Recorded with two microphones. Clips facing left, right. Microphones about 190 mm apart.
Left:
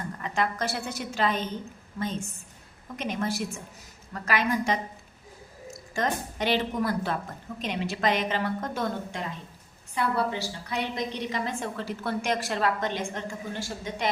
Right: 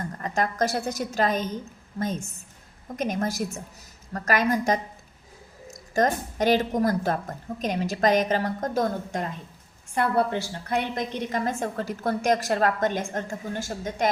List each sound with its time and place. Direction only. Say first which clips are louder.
0.2 s a woman's voice: right 4 dB; 40° right (ahead or behind)
2.9 s a woman's voice: right 3 dB; 45° right (ahead or behind)
5.9 s a woman's voice: right 6 dB; 45° right (ahead or behind)
9.9 s a woman's voice: right 4 dB; 50° right (ahead or behind)